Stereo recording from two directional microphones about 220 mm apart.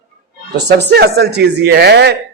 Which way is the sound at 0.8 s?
50° right (ahead or behind).